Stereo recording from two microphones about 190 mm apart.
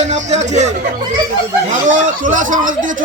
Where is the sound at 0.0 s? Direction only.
35° right (ahead or behind).